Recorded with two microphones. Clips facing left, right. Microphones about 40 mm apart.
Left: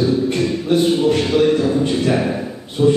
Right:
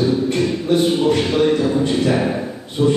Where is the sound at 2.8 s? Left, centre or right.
Centre.